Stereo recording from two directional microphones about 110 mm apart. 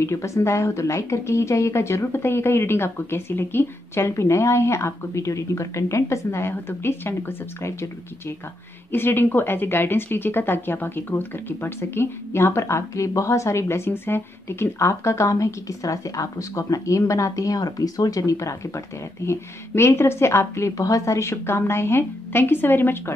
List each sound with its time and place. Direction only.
0.0 s speech: 25° left (ahead or behind)
8.9 s speech: 20° left (ahead or behind)